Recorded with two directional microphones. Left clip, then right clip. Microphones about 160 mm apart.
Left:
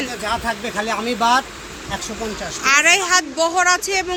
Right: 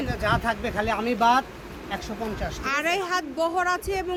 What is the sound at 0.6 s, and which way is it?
Speech, 20° left (ahead or behind).